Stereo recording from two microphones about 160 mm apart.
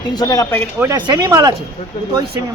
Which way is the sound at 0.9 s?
25° right (ahead or behind).